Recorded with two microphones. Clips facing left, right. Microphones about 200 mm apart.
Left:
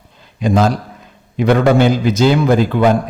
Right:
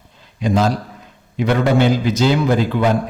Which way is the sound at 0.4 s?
50° left (ahead or behind).